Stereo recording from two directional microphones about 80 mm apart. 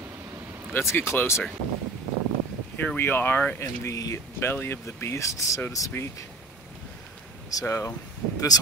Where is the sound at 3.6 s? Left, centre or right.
Left.